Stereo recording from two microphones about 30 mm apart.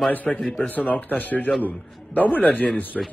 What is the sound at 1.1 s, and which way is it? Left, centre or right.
Speech, left.